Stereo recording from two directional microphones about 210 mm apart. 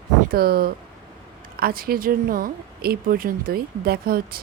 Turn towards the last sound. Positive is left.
turn(degrees=-45)  # may be behind; listen again after turning